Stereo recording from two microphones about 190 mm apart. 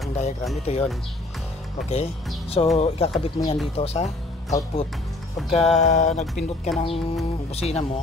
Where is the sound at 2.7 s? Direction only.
35° left (ahead or behind).